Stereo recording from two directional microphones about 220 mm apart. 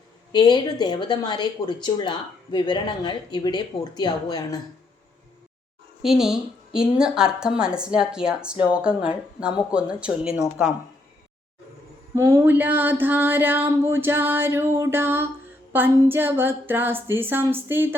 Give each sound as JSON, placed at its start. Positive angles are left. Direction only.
{"t": 0.3, "sound": "speech", "side_deg": 20}
{"t": 6.0, "sound": "a woman's voice", "side_deg": 0}
{"t": 12.1, "sound": "a sound", "side_deg": -10}